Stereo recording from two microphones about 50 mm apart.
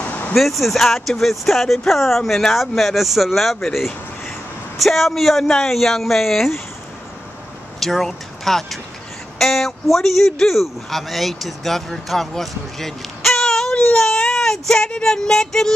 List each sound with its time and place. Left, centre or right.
0.0 s a sound: left
0.3 s speech: centre
4.7 s speech: centre
7.8 s speech: centre
13.9 s baby cry: centre
14.9 s music: centre